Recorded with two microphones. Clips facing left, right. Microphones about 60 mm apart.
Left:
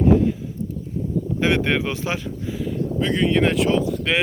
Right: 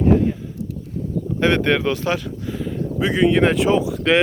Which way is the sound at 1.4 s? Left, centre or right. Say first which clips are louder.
Right 3 dB; centre.